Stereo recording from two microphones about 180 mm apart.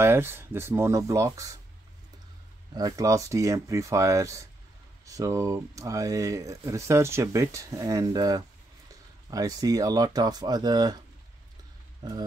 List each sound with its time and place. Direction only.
0.0 s speech: 10° right (ahead or behind)
2.7 s speech: 20° right (ahead or behind)
12.0 s speech: 20° right (ahead or behind)